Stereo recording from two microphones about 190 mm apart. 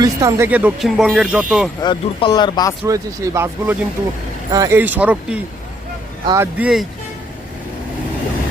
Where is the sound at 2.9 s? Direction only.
15° right (ahead or behind).